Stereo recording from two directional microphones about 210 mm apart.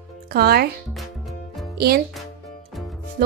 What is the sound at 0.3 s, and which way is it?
Speech, 45° right (ahead or behind).